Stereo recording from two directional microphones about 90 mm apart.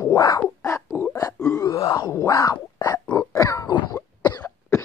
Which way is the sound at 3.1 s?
40° left (ahead or behind).